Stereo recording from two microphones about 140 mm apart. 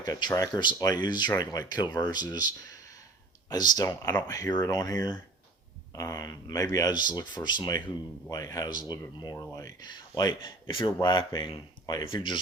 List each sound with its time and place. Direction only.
0.0 s speech: 30° left (ahead or behind)